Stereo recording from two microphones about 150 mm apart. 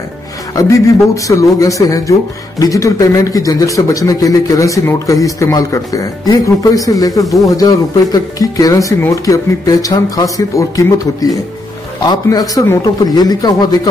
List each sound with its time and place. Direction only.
0.6 s speech: 20° left (ahead or behind)